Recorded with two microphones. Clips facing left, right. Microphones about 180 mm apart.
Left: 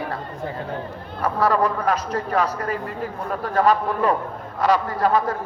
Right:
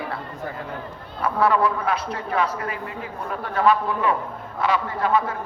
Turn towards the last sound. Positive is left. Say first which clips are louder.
# left 2 dB
turn(degrees=40)  # may be behind; listen again after turning